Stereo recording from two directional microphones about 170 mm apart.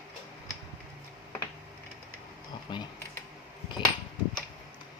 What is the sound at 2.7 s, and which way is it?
Speech, 25° left (ahead or behind).